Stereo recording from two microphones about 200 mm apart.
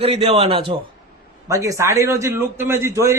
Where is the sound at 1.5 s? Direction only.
15° right (ahead or behind).